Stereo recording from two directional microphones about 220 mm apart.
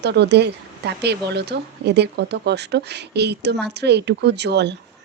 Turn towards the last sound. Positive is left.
turn(degrees=-50)  # may be behind; listen again after turning